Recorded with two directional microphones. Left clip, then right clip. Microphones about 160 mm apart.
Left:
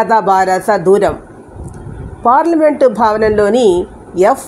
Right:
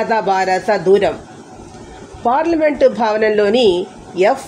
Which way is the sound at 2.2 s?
35° left (ahead or behind).